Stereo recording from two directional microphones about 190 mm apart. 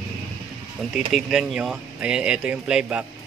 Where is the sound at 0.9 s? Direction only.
Centre (ahead or behind).